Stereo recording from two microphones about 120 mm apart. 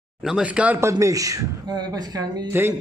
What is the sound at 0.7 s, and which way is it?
A woman's voice, 25° right (ahead or behind).